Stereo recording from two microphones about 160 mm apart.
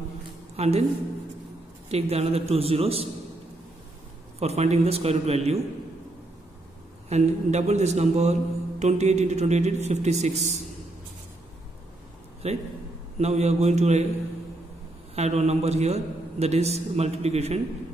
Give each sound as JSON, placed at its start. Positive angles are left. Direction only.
{"t": 0.6, "sound": "a man's voice", "side_deg": -40}
{"t": 1.9, "sound": "a man's voice", "side_deg": -40}
{"t": 4.4, "sound": "a man's voice", "side_deg": -40}
{"t": 7.1, "sound": "a man's voice", "side_deg": -45}
{"t": 12.4, "sound": "a man's voice", "side_deg": -40}
{"t": 15.1, "sound": "a man's voice", "side_deg": -40}